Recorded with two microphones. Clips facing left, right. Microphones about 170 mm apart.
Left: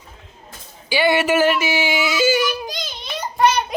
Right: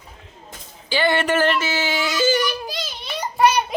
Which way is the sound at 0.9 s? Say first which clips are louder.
Left 2 dB; 10° left (ahead or behind).